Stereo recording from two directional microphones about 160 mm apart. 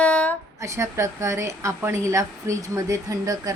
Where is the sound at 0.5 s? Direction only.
20° right (ahead or behind).